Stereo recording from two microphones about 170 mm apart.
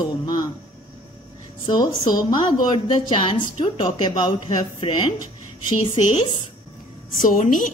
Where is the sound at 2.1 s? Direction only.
25° left (ahead or behind).